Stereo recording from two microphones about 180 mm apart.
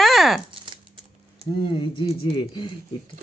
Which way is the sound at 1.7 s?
30° left (ahead or behind).